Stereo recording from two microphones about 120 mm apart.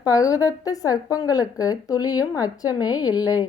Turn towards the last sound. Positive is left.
turn(degrees=35)  # may be behind; listen again after turning